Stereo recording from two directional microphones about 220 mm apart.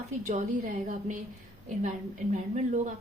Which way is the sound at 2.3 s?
35° right (ahead or behind).